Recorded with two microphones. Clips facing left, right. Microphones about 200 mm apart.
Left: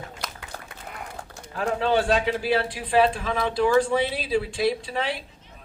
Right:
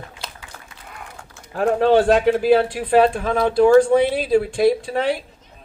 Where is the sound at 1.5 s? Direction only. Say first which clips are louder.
Right 8 dB; 50° right (ahead or behind).